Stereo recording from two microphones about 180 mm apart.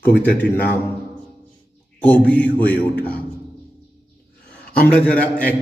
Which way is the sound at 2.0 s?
10° left (ahead or behind).